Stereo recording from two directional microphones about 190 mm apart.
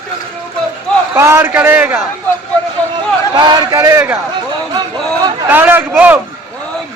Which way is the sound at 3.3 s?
20° right (ahead or behind).